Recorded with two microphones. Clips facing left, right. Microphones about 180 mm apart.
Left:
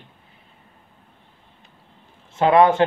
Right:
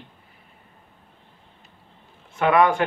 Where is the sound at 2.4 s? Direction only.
25° left (ahead or behind).